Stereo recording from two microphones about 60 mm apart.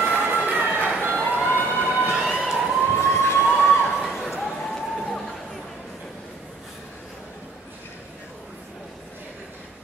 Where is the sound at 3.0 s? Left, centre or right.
Left.